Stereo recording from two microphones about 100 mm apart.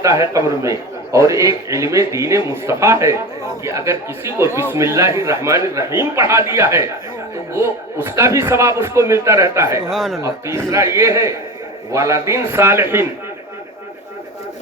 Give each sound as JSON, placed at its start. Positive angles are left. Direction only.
{"t": 0.3, "sound": "a man's voice", "side_deg": -30}
{"t": 9.9, "sound": "speech", "side_deg": 5}
{"t": 10.2, "sound": "a man's voice", "side_deg": -30}